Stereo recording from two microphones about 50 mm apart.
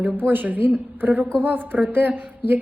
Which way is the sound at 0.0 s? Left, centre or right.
Right.